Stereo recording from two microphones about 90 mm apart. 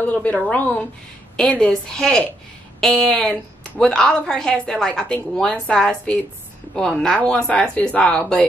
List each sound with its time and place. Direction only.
0.1 s a woman's voice: 15° left (ahead or behind)